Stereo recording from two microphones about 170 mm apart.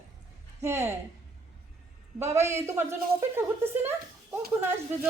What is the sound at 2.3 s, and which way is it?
A woman's voice, 15° right (ahead or behind).